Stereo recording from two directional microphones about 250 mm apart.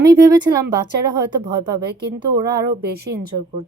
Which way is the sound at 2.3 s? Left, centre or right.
Centre.